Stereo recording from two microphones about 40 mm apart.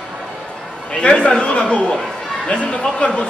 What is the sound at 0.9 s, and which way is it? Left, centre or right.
A man's voice, left.